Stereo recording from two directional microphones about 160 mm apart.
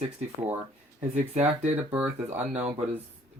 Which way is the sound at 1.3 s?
45° right (ahead or behind).